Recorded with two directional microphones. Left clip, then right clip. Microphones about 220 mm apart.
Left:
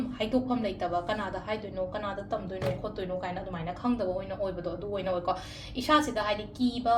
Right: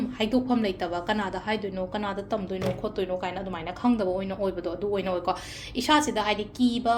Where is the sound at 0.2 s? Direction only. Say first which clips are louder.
Right 4 dB; 35° right (ahead or behind).